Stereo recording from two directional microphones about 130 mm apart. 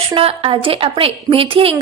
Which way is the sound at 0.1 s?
45° right (ahead or behind).